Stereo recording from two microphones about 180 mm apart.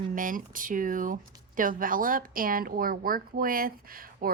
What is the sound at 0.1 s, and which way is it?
Speech, 50° right (ahead or behind).